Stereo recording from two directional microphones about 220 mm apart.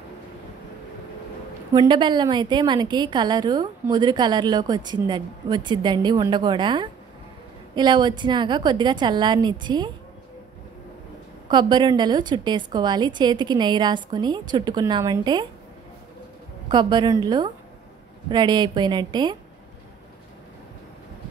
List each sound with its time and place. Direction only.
1.7 s a woman's voice: 20° right (ahead or behind)
11.5 s a woman's voice: 20° right (ahead or behind)
16.6 s a woman's voice: 20° right (ahead or behind)